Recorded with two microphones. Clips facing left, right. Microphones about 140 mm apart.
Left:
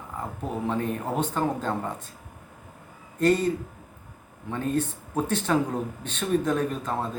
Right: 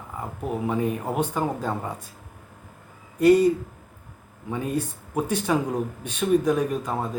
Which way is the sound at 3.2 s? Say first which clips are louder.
Right 6 dB; 10° right (ahead or behind).